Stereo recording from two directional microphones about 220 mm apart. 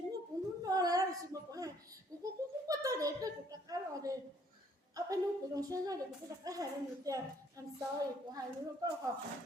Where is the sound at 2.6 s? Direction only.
15° right (ahead or behind).